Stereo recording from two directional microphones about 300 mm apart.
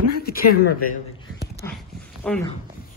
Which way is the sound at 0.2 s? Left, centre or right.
Left.